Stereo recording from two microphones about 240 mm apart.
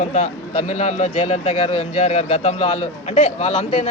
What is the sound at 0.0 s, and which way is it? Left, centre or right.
Speech, left.